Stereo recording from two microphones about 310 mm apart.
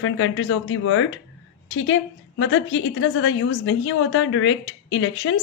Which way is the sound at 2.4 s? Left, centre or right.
Left.